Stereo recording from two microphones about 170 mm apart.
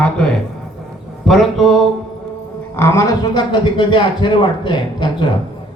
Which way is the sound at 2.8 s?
15° left (ahead or behind).